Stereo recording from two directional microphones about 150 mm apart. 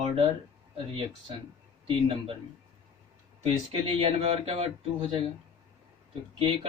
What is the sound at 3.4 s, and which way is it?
Speech, 40° right (ahead or behind).